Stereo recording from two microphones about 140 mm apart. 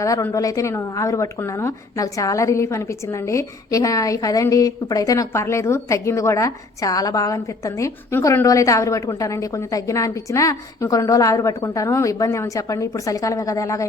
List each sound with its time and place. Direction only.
0.0 s speech: 20° left (ahead or behind)